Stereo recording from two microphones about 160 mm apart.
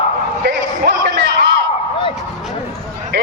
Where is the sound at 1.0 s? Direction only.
90° right.